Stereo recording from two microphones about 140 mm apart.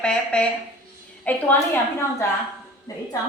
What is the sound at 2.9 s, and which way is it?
Speech, 25° left (ahead or behind).